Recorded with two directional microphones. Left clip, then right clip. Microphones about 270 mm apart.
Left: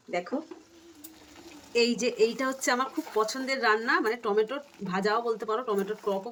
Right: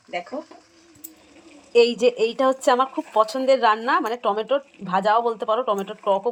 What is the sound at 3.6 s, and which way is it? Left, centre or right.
Speech, right.